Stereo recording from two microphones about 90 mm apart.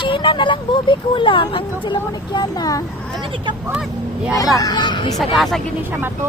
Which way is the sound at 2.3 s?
45° left (ahead or behind).